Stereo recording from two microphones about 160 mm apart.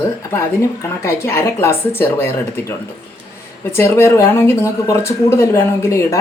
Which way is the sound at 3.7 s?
15° left (ahead or behind).